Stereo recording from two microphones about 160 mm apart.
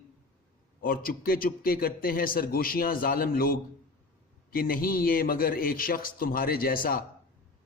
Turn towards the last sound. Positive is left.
turn(degrees=65)  # may be behind; listen again after turning